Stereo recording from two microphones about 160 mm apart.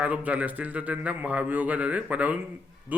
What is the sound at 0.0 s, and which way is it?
A man's voice, 10° right (ahead or behind).